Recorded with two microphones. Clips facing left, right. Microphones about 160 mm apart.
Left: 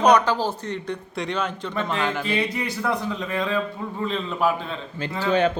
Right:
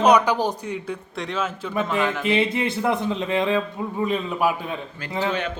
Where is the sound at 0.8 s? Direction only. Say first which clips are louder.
Left 1 dB; centre (ahead or behind).